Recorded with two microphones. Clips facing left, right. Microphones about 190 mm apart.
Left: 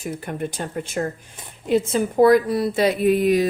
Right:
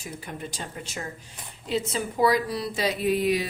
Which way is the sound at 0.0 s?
55° left (ahead or behind).